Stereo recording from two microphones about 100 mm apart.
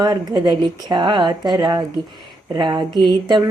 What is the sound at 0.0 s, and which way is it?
Speech, 45° right (ahead or behind).